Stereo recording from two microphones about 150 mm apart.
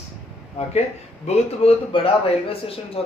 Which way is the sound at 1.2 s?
40° left (ahead or behind).